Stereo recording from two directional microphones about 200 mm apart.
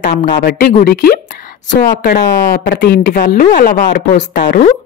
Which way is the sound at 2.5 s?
50° left (ahead or behind).